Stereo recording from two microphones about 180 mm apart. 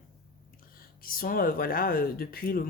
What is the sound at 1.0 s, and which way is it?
Speech, 50° left (ahead or behind).